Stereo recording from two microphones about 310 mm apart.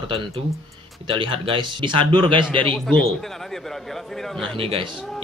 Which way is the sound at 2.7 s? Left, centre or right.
Centre.